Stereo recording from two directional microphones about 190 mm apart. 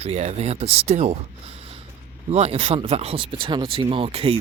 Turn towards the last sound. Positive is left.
turn(degrees=-30)  # may be behind; listen again after turning